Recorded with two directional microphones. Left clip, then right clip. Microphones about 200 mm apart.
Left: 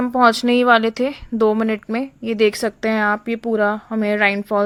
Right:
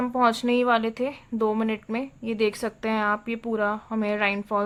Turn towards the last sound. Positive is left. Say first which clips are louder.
# left 7 dB
turn(degrees=25)  # may be behind; listen again after turning